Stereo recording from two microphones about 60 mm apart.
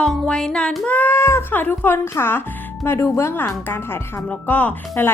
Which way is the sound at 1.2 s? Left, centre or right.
Left.